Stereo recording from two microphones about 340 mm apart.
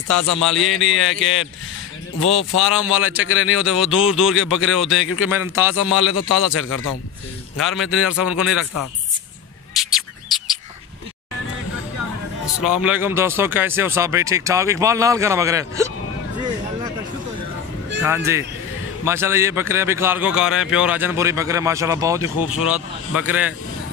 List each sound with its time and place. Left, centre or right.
0.4 s speech: centre
1.2 s a man's voice: left
2.6 s speech: centre
3.3 s a man's voice: left
3.5 s speech: centre
6.5 s a man's voice: left
7.6 s speech: centre
9.8 s a sound: centre
12.6 s speech: centre
18.0 s speech: centre